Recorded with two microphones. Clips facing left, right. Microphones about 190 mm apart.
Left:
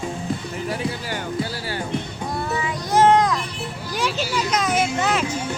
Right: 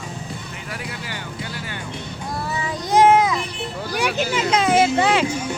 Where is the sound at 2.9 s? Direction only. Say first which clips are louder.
Right 1 dB; 10° right (ahead or behind).